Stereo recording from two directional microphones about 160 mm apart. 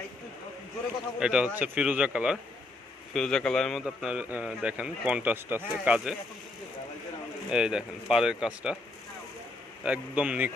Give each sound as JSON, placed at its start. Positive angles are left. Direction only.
{"t": 1.2, "sound": "a man's voice", "side_deg": -5}
{"t": 3.1, "sound": "a man's voice", "side_deg": 5}
{"t": 7.4, "sound": "speech", "side_deg": -5}
{"t": 9.8, "sound": "a man's voice", "side_deg": -10}